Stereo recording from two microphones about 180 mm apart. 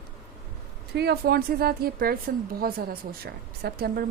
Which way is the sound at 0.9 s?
60° right (ahead or behind).